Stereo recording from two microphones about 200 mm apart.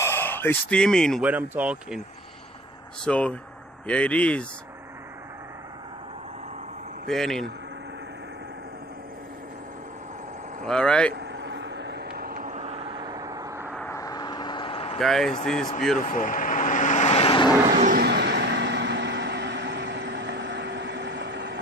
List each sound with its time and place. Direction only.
0.0 s speech: 10° left (ahead or behind)
1.2 s speech: 10° right (ahead or behind)
3.0 s speech: 5° left (ahead or behind)
7.1 s speech: centre (ahead or behind)
10.7 s speech: 5° left (ahead or behind)
11.1 s vehicle: 60° right (ahead or behind); by 13.7 s 15° right (ahead or behind)
13.7 s vehicle: 15° left (ahead or behind)
15.0 s speech: centre (ahead or behind)
16.0 s vehicle: 40° left (ahead or behind)
17.6 s vehicle: 40° right (ahead or behind)
18.0 s vehicle: 55° right (ahead or behind)